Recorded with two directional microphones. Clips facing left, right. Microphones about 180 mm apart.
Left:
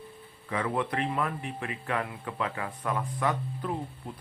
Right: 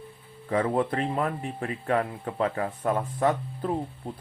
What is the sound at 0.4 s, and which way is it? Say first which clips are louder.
Speech: right 5 dB; 35° right (ahead or behind).